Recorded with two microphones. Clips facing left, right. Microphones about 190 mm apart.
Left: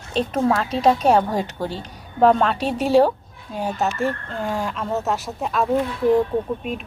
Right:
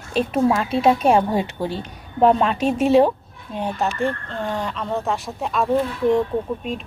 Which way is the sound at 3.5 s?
Centre (ahead or behind).